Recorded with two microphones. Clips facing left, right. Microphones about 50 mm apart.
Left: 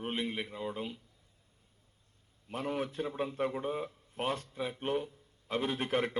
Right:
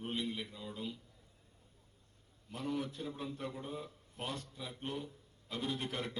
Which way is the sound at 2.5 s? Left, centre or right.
Left.